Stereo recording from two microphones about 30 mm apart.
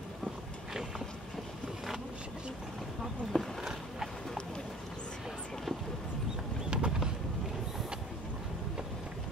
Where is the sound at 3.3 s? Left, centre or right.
Left.